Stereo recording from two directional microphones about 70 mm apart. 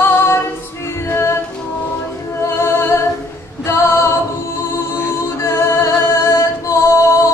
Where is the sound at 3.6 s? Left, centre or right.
Left.